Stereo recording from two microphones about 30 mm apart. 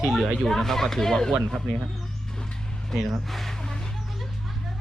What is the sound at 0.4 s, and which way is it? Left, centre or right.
Speech, centre.